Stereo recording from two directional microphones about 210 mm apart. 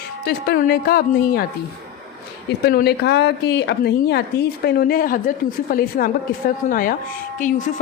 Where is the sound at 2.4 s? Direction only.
50° left (ahead or behind).